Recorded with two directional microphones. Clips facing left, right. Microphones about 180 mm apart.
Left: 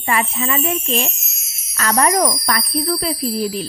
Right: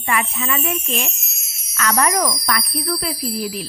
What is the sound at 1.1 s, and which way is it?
Music, centre (ahead or behind).